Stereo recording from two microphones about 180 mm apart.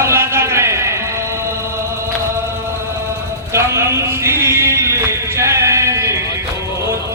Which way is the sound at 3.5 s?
15° right (ahead or behind).